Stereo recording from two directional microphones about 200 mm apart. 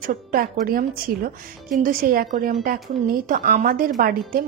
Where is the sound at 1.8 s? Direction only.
45° right (ahead or behind).